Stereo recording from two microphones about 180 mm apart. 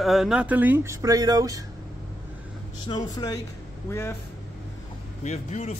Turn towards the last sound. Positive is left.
turn(degrees=40)  # may be behind; listen again after turning